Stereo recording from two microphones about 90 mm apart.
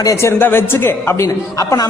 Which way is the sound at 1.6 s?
40° left (ahead or behind).